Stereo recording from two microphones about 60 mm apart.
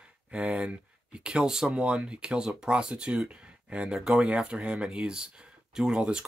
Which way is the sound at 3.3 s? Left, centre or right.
Centre.